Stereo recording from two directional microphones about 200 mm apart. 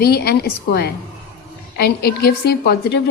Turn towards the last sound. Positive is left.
turn(degrees=55)  # may be behind; listen again after turning